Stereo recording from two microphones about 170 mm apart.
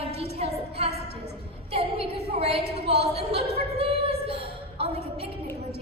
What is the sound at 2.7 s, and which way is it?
Speech, 35° right (ahead or behind).